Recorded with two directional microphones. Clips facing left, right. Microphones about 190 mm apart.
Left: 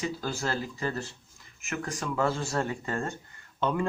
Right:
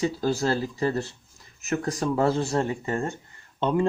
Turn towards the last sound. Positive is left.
turn(degrees=-25)  # may be behind; listen again after turning